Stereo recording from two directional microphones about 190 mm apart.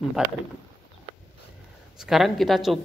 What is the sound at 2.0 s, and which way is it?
Speech, centre (ahead or behind).